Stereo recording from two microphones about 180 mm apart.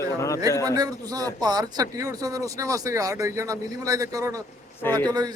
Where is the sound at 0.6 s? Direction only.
20° right (ahead or behind).